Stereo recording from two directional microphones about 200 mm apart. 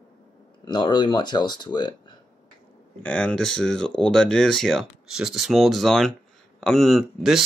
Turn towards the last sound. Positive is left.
turn(degrees=0)  # may be behind; listen again after turning